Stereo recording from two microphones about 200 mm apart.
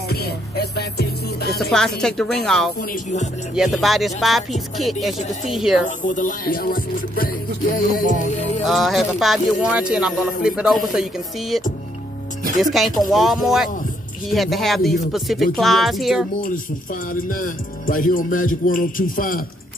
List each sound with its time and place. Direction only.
0.1 s music: 50° left (ahead or behind)
1.6 s speech: 5° left (ahead or behind)
2.8 s speech: 40° left (ahead or behind)
3.5 s speech: centre (ahead or behind)
5.9 s music: 40° left (ahead or behind)
8.6 s speech: centre (ahead or behind)
12.7 s speech: centre (ahead or behind)
17.1 s music: 45° left (ahead or behind)